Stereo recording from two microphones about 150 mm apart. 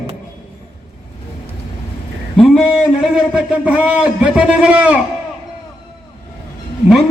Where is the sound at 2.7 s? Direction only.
5° right (ahead or behind).